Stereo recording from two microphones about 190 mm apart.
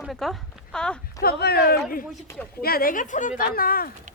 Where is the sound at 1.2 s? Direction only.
55° left (ahead or behind).